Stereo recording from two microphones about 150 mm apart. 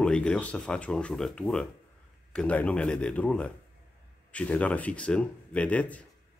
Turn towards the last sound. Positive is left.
turn(degrees=10)  # may be behind; listen again after turning